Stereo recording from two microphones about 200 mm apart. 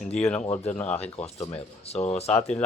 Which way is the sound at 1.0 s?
30° left (ahead or behind).